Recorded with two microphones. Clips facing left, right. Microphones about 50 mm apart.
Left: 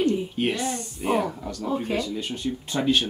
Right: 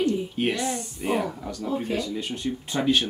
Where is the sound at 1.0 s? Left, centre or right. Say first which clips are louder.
Left 2 dB; centre.